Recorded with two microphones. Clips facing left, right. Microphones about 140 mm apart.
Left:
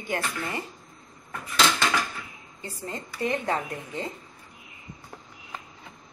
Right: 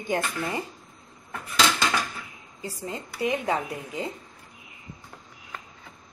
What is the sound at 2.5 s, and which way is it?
Speech, 10° right (ahead or behind).